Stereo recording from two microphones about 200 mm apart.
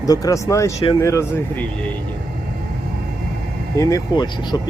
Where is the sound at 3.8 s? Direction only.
15° left (ahead or behind).